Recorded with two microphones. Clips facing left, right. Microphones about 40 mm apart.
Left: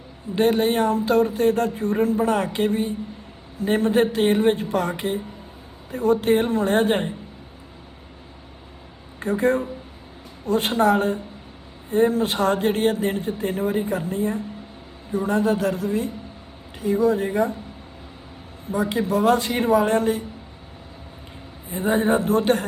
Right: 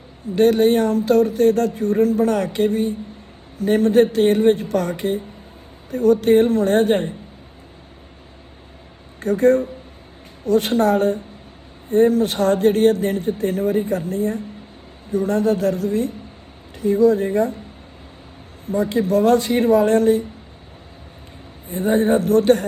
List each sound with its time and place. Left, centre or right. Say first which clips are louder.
0.3 s speech: right 5 dB; left
9.2 s speech: right 5 dB; left
18.7 s speech: right 4 dB; left
21.7 s speech: right 3 dB; left